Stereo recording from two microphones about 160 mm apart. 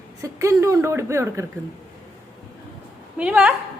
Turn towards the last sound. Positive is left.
turn(degrees=-10)  # may be behind; listen again after turning